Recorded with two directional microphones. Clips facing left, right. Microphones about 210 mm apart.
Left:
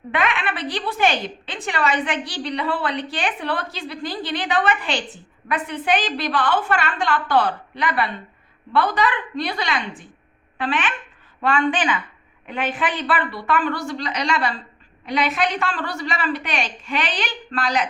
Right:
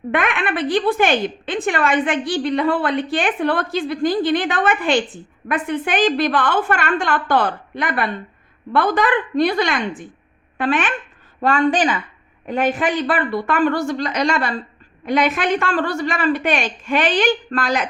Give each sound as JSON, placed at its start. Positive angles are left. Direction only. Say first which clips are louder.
{"t": 0.1, "sound": "a woman's voice", "louder": "right 3 dB", "side_deg": -50}